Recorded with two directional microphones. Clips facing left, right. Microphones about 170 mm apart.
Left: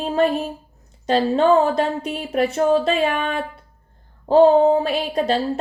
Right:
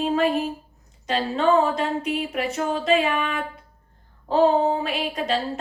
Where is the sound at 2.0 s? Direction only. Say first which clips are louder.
Left 4 dB; 35° left (ahead or behind).